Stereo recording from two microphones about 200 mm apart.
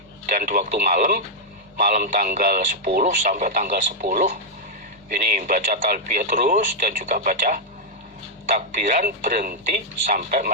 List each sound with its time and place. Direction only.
0.3 s speech: 40° right (ahead or behind)